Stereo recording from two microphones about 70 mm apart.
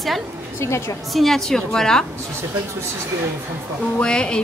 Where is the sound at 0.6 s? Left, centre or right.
Left.